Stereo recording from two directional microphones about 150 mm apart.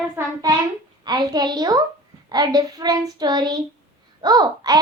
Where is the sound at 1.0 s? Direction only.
30° right (ahead or behind).